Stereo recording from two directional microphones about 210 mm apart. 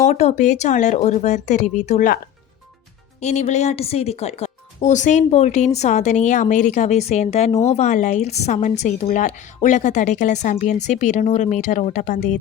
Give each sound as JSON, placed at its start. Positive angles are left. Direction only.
{"t": 0.0, "sound": "speech", "side_deg": 30}
{"t": 3.2, "sound": "speech", "side_deg": 30}